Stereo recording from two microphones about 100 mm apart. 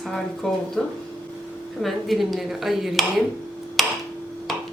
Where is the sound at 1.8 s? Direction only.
Centre (ahead or behind).